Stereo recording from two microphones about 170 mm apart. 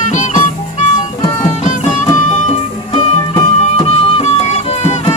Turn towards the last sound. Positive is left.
turn(degrees=35)  # may be behind; listen again after turning